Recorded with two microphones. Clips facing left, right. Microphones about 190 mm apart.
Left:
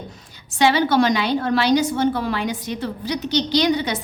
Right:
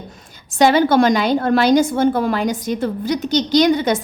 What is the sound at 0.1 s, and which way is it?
A woman's voice, 45° right (ahead or behind).